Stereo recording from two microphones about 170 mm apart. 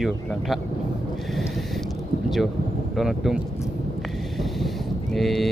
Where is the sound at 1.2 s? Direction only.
Centre (ahead or behind).